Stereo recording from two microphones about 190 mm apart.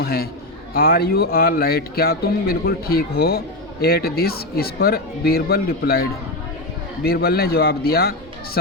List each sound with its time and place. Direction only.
0.0 s a man's voice: 55° left (ahead or behind)